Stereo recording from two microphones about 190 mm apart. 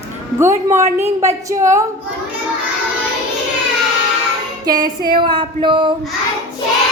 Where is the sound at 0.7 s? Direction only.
15° right (ahead or behind).